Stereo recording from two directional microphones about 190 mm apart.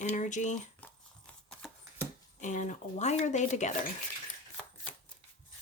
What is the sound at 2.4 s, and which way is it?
Speech, 40° left (ahead or behind).